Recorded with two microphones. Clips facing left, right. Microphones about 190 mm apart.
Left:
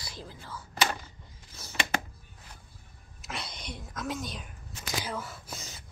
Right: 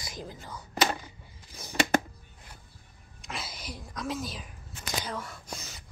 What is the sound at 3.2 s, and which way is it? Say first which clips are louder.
A woman's voice: even; centre (ahead or behind).